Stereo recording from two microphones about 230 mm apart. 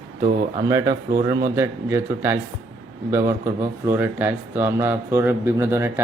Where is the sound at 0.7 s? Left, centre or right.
Centre.